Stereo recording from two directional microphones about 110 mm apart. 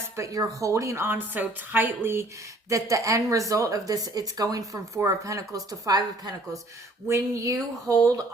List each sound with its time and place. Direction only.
0.2 s speech: 30° right (ahead or behind)